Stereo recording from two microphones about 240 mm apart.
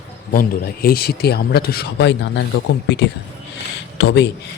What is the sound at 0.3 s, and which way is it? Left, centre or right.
Speech, left.